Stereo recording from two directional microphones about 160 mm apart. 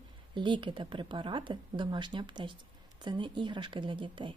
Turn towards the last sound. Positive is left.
turn(degrees=-30)  # may be behind; listen again after turning